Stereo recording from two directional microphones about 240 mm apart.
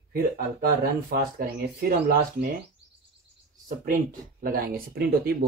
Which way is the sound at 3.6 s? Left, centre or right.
Right.